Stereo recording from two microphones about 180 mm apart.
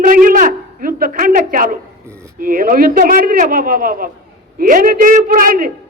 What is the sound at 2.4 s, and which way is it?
A man's voice, 50° right (ahead or behind).